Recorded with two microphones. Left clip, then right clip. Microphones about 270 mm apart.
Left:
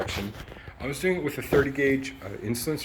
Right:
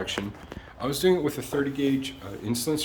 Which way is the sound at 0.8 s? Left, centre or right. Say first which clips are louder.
Right 4 dB; right.